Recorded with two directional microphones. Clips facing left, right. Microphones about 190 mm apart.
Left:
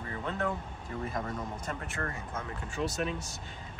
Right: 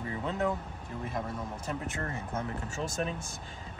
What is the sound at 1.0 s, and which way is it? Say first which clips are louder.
Speech: even; 5° right (ahead or behind).